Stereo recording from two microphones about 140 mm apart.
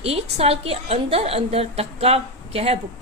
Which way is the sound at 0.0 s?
45° right (ahead or behind).